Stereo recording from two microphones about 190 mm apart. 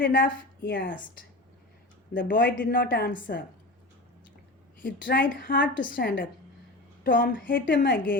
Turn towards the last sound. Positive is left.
turn(degrees=50)  # may be behind; listen again after turning